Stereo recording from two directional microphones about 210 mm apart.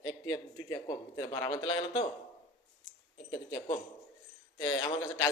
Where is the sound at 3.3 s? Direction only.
15° left (ahead or behind).